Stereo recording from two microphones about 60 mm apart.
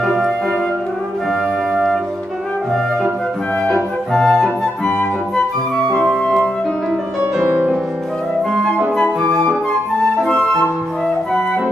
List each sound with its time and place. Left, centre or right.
0.0 s music: centre
3.6 s music: centre
7.3 s music: right
8.5 s flute: centre
8.9 s flute: centre